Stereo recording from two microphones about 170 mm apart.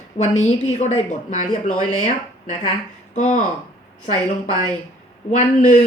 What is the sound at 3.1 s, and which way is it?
Speech, 45° left (ahead or behind).